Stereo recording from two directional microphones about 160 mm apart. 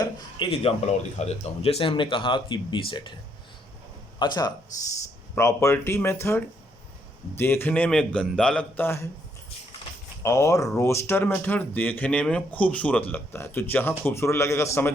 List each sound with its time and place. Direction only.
0.0 s a sound: 35° left (ahead or behind)
1.2 s speech: 40° left (ahead or behind)
4.2 s speech: 25° left (ahead or behind)
10.2 s speech: 20° left (ahead or behind)